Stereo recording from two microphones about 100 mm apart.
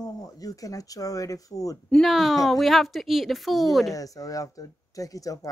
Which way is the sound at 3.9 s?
35° left (ahead or behind).